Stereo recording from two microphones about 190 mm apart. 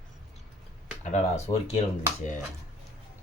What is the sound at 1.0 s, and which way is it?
Speech, 35° left (ahead or behind).